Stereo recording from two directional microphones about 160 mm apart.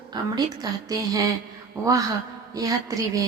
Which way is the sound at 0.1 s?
25° right (ahead or behind).